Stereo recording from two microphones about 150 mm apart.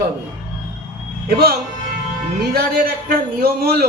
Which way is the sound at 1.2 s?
90° right.